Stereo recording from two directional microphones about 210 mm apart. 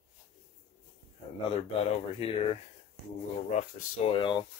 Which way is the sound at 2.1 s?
25° left (ahead or behind).